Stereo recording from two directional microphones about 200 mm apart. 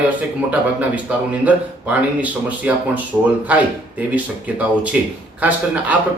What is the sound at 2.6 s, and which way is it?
Speech, 10° right (ahead or behind).